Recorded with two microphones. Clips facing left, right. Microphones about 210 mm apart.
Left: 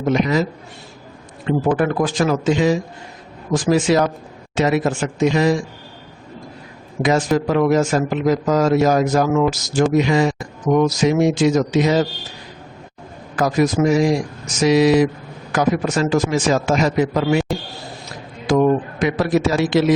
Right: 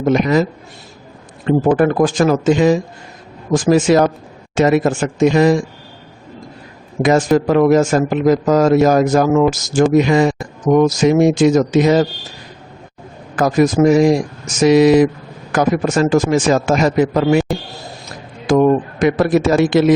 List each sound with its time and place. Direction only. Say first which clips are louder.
0.0 s a man's voice: right 4 dB; 50° right (ahead or behind)
1.5 s a man's voice: right 5 dB; 45° right (ahead or behind)
7.0 s a man's voice: right 4 dB; 50° right (ahead or behind)
13.3 s a man's voice: right 4 dB; 50° right (ahead or behind)
18.4 s a man's voice: right 3 dB; 50° right (ahead or behind)